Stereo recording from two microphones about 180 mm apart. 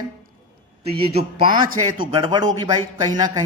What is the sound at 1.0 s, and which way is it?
A man's voice, 35° right (ahead or behind).